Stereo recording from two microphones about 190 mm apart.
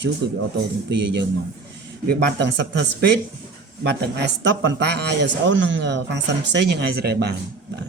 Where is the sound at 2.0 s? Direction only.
65° right (ahead or behind).